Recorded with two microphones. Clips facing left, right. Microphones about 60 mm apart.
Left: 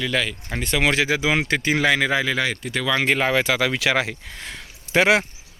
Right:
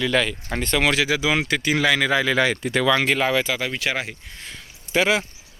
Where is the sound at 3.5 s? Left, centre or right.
Left.